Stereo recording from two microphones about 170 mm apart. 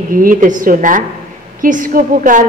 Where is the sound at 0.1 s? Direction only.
55° right (ahead or behind).